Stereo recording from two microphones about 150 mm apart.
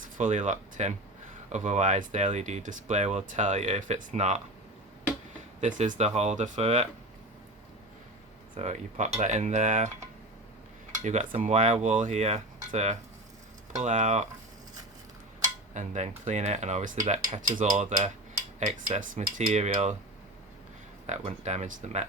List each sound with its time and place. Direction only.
0.2 s speech: 55° right (ahead or behind)
5.5 s speech: 55° right (ahead or behind)
8.6 s speech: 50° right (ahead or behind)
10.9 s cutlery: 55° right (ahead or behind)
11.3 s speech: 55° right (ahead or behind)
15.7 s speech: 55° right (ahead or behind)
21.1 s speech: 50° right (ahead or behind)